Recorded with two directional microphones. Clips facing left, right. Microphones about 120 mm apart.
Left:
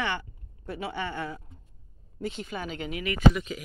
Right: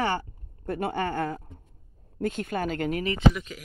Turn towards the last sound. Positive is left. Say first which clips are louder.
# left 3 dB
turn(degrees=5)  # may be behind; listen again after turning